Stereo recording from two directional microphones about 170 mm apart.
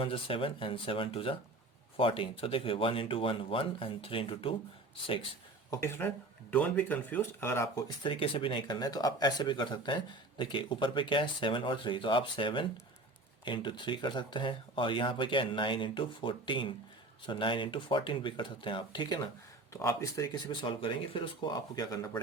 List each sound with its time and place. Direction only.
0.0 s speech: 30° left (ahead or behind)
5.7 s speech: 15° left (ahead or behind)
20.5 s speech: 30° left (ahead or behind)